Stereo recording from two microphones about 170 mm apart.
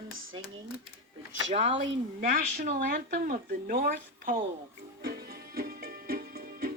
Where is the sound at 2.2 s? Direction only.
55° right (ahead or behind).